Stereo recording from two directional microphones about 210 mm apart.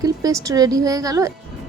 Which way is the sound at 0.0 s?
15° right (ahead or behind).